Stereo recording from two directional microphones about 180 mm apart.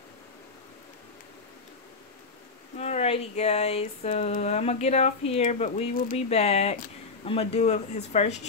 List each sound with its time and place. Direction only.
2.8 s speech: 35° left (ahead or behind)